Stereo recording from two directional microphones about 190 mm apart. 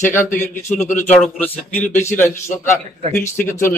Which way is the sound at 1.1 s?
5° left (ahead or behind).